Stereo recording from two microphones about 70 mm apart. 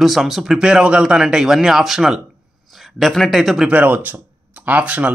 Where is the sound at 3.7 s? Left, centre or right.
Right.